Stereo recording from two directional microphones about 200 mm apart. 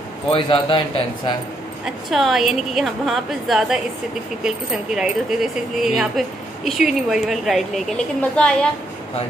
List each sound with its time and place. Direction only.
0.3 s a man's voice: 25° left (ahead or behind)
2.0 s a woman's voice: centre (ahead or behind)